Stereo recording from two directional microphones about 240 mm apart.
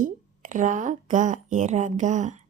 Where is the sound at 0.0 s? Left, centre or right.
Right.